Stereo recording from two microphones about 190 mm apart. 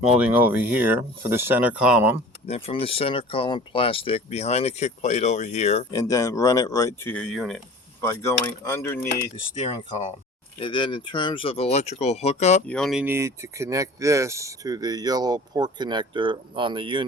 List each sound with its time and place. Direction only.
0.1 s speech: 10° right (ahead or behind)
2.5 s speech: 30° left (ahead or behind)
5.9 s speech: 20° left (ahead or behind); by 7.6 s centre (ahead or behind)
8.0 s speech: 15° left (ahead or behind)
9.6 s speech: 35° left (ahead or behind)
12.6 s speech: 5° left (ahead or behind); by 17.1 s 25° right (ahead or behind)